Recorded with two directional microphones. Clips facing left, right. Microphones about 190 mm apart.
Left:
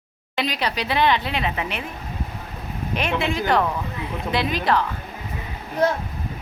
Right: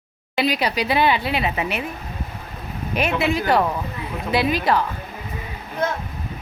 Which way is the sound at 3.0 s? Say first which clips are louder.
Right 3 dB; 5° right (ahead or behind).